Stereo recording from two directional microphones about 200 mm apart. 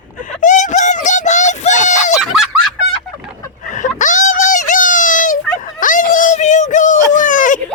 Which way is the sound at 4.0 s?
40° left (ahead or behind).